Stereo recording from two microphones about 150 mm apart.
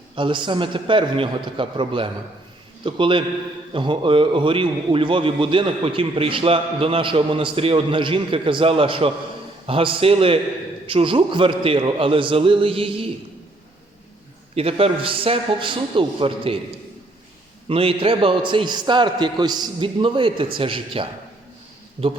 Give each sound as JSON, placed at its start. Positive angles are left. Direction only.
{"t": 0.2, "sound": "a man's voice", "side_deg": -30}
{"t": 14.5, "sound": "a man's voice", "side_deg": -40}
{"t": 17.7, "sound": "a man's voice", "side_deg": -40}